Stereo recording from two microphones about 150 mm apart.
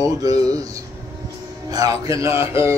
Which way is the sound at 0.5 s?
25° right (ahead or behind).